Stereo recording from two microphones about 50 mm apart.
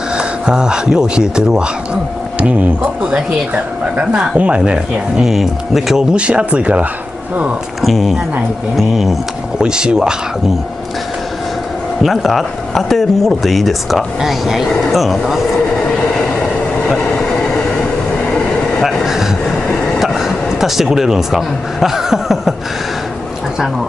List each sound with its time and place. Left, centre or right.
0.1 s speech: centre
3.1 s speech: right
5.2 s speech: centre
6.1 s speech: right
7.8 s speech: centre
9.6 s speech: centre
12.0 s speech: centre
20.0 s speech: centre